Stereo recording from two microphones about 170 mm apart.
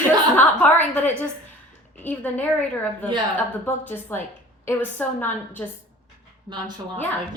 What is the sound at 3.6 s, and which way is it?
Speech, 10° left (ahead or behind).